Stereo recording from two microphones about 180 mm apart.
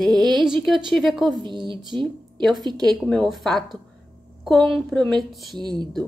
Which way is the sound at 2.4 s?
Centre (ahead or behind).